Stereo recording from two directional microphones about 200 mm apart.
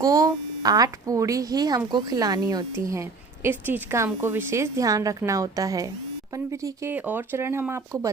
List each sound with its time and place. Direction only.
0.0 s a woman's voice: 20° right (ahead or behind)